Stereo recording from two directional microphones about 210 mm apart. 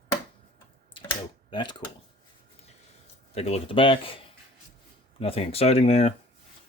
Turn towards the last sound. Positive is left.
turn(degrees=30)  # may be behind; listen again after turning